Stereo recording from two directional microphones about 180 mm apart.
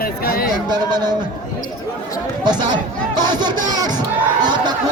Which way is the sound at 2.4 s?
25° right (ahead or behind).